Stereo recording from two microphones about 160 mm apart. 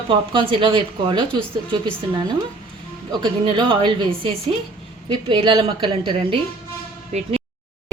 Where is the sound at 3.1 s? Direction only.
30° right (ahead or behind).